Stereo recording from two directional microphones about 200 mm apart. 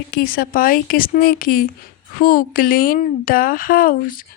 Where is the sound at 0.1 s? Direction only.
50° left (ahead or behind).